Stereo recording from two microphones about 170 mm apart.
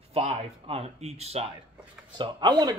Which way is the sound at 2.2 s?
25° right (ahead or behind).